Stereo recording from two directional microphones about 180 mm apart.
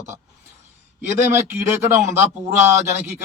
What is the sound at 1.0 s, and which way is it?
A man's voice, 15° right (ahead or behind).